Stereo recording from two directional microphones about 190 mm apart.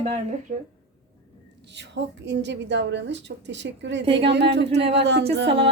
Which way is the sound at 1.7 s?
65° right (ahead or behind).